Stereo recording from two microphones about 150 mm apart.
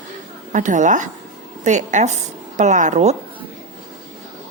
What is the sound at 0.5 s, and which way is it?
A woman's voice, 55° right (ahead or behind).